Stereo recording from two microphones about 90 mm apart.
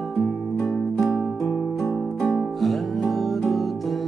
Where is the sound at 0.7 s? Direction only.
30° left (ahead or behind).